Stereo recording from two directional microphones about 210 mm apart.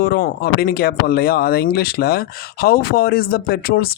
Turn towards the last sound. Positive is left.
turn(degrees=45)  # may be behind; listen again after turning